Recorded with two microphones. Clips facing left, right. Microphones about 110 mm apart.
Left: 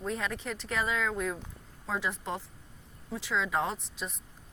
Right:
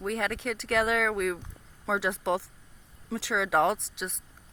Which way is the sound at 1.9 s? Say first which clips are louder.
Right 6 dB; 85° right.